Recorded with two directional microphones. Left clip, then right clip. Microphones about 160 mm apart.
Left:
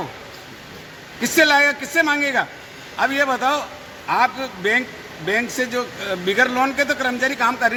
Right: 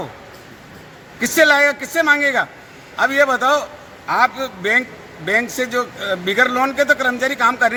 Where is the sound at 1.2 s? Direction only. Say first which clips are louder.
Right 2 dB; 25° right (ahead or behind).